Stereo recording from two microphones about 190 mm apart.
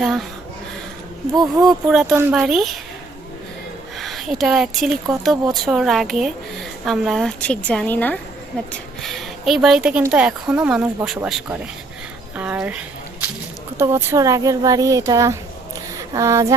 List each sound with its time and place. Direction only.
0.0 s speech: centre (ahead or behind)
1.6 s speech: centre (ahead or behind)
3.9 s speech: centre (ahead or behind)
12.4 s a sound: 5° right (ahead or behind)
13.7 s speech: 15° right (ahead or behind)